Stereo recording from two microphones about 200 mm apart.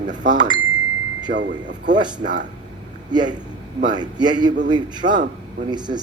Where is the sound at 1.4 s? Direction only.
60° right (ahead or behind).